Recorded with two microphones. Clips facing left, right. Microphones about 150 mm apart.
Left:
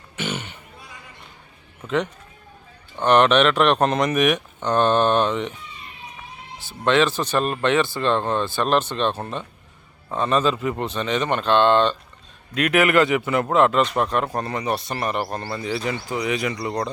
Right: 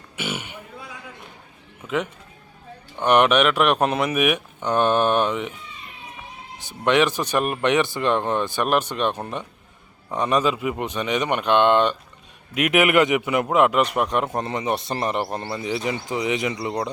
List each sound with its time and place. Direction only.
0.2 s a sound: 10° right (ahead or behind)
3.0 s speech: 10° right (ahead or behind)
6.6 s a man's voice: 15° right (ahead or behind)